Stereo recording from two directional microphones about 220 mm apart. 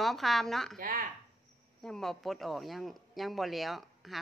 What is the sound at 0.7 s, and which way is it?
Speech, 40° right (ahead or behind).